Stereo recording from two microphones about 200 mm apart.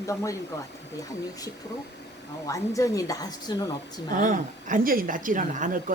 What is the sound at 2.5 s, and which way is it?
Speech, 15° left (ahead or behind).